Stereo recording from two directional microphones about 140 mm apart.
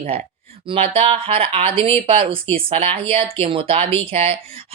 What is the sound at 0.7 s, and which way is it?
Speech, 40° right (ahead or behind).